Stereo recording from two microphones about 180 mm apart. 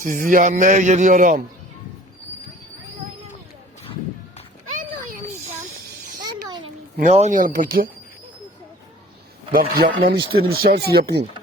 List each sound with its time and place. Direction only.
0.0 s speech: 45° right (ahead or behind)
4.7 s a sound: 50° right (ahead or behind)
7.1 s speech: 40° right (ahead or behind)
9.5 s speech: 55° right (ahead or behind)